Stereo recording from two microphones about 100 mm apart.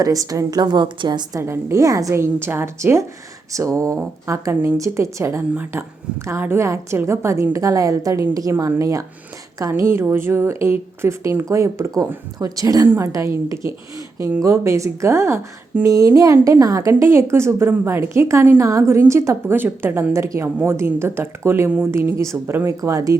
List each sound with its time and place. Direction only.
0.0 s a woman's voice: 35° right (ahead or behind)
1.4 s a woman's voice: 25° right (ahead or behind)